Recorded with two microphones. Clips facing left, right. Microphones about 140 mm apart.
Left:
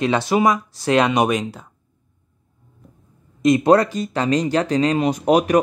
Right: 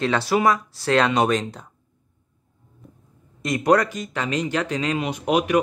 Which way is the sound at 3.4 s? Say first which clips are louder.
Left 5 dB; 20° left (ahead or behind).